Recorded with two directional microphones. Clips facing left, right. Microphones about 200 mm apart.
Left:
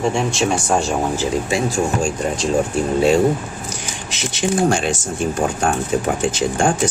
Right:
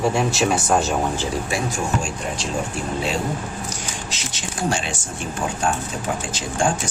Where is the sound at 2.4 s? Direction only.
40° left (ahead or behind).